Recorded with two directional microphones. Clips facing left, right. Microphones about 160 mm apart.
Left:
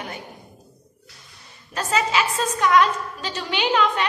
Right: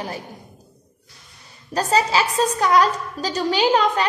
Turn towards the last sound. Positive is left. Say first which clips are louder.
# right 3 dB
turn(degrees=-35)  # may be behind; listen again after turning